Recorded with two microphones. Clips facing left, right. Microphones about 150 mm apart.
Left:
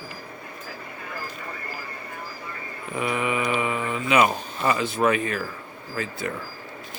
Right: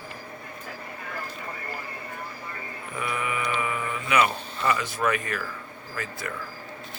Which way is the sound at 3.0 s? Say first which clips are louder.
Left 5 dB; 20° left (ahead or behind).